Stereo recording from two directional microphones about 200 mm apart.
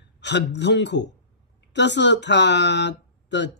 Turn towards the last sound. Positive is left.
turn(degrees=60)  # may be behind; listen again after turning